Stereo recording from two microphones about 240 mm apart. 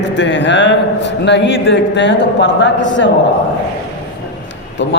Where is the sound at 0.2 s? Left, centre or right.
Left.